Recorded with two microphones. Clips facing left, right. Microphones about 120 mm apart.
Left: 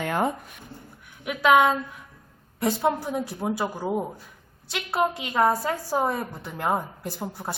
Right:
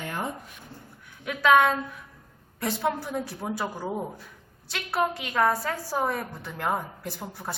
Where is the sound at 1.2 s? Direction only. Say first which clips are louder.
Left 1 dB; 15° left (ahead or behind).